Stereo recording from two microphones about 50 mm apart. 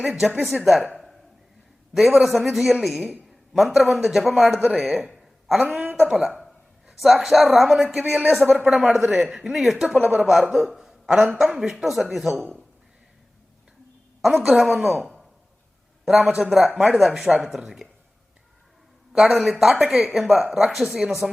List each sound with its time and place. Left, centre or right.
0.6 s a man's voice: centre
1.9 s a man's voice: centre
5.5 s speech: centre
10.0 s speech: right
10.4 s a man's voice: centre
14.2 s a man's voice: centre
19.1 s a man's voice: centre